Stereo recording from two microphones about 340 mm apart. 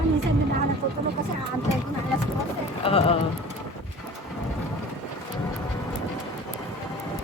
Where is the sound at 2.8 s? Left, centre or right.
Centre.